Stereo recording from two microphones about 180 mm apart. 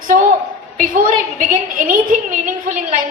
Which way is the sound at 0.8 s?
50° right (ahead or behind).